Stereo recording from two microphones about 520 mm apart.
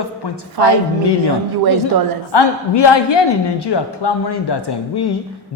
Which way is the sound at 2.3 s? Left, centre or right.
Left.